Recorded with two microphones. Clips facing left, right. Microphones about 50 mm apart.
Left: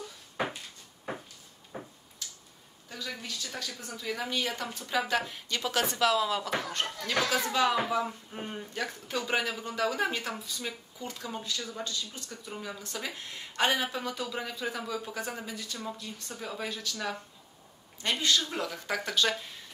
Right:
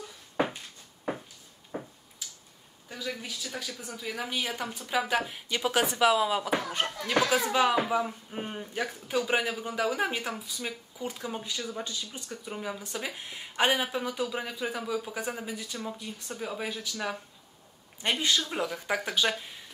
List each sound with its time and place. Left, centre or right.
1.7 s a sound: centre
2.2 s tick-tock: centre
2.9 s speech: centre